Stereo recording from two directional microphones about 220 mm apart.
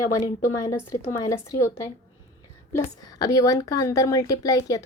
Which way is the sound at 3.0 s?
15° left (ahead or behind).